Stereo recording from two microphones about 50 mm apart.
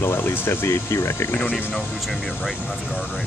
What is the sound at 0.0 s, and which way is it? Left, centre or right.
Speech, left.